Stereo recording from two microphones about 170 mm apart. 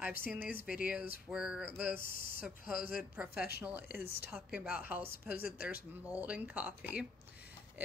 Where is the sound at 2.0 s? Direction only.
55° left (ahead or behind).